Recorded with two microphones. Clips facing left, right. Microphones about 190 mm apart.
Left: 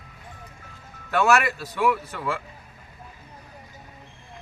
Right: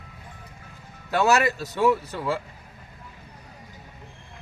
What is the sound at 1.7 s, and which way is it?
Speech, 25° right (ahead or behind).